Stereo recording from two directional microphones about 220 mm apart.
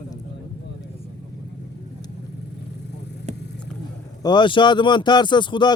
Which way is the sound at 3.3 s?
30° right (ahead or behind).